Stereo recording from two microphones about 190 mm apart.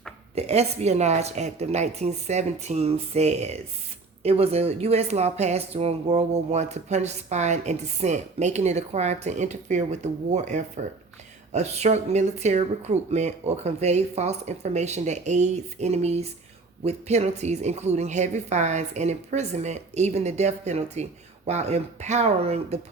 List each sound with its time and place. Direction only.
0.3 s speech: 35° right (ahead or behind)